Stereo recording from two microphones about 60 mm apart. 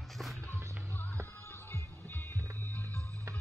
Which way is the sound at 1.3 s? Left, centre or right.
Left.